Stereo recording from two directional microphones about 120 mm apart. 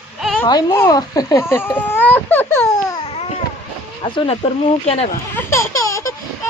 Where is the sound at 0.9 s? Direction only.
30° left (ahead or behind).